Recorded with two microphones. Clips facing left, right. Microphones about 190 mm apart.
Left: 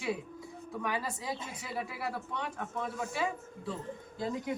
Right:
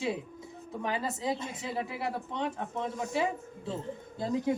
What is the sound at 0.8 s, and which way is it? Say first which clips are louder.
Speech: right 3 dB; 25° right (ahead or behind).